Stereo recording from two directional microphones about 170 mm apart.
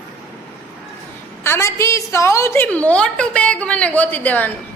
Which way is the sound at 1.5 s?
15° left (ahead or behind).